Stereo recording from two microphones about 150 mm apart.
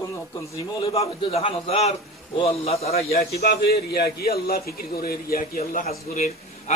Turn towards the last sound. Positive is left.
turn(degrees=50)  # may be behind; listen again after turning